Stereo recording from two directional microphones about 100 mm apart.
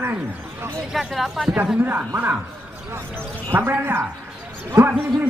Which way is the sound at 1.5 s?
15° right (ahead or behind).